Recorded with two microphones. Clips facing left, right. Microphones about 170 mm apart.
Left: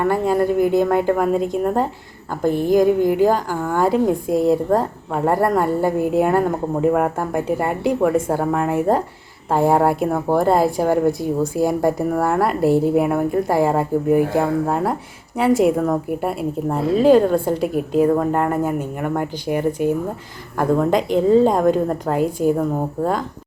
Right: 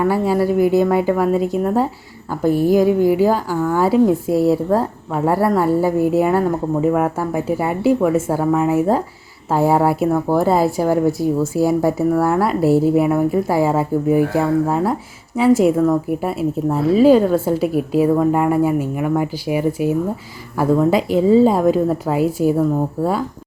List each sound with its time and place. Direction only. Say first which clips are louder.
0.0 s speech: right 1 dB; 5° right (ahead or behind)